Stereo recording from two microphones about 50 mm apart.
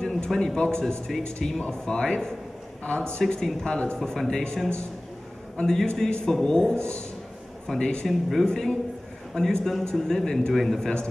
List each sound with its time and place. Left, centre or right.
0.0 s a sound: centre
0.6 s a man's voice: centre
5.6 s a man's voice: centre
7.6 s a man's voice: centre
8.1 s a man's voice: centre